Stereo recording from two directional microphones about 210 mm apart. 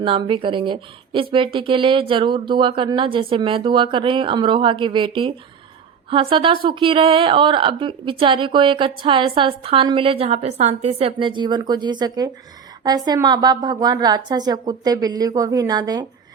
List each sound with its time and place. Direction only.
0.0 s speech: 25° right (ahead or behind)